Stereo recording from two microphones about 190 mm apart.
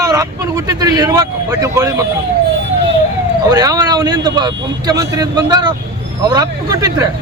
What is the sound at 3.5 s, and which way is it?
Speech, 20° right (ahead or behind).